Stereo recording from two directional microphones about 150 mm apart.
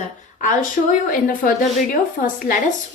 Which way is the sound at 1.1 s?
65° left (ahead or behind).